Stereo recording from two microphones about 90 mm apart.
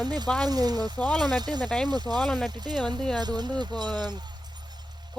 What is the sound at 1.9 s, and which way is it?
Speech, 50° right (ahead or behind).